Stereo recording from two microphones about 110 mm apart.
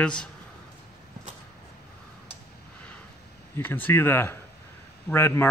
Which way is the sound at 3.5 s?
20° left (ahead or behind).